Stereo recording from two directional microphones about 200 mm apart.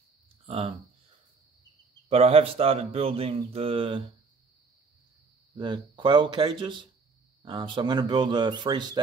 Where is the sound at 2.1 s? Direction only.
30° right (ahead or behind).